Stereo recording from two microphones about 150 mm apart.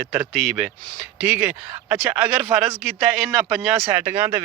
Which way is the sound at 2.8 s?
5° right (ahead or behind).